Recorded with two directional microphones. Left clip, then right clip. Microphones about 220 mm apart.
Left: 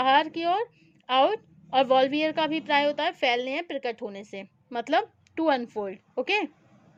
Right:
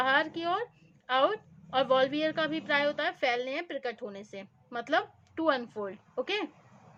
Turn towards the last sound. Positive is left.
turn(degrees=30)  # may be behind; listen again after turning